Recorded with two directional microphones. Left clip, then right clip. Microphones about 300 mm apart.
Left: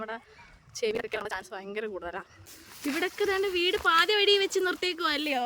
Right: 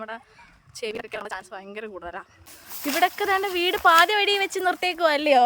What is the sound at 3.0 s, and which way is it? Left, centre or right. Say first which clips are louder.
Speech: right 7 dB; centre.